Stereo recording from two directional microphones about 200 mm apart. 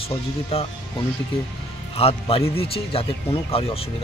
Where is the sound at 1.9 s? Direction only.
30° left (ahead or behind).